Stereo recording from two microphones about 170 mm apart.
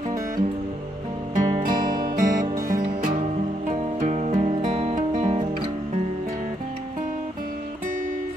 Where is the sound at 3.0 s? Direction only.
50° right (ahead or behind).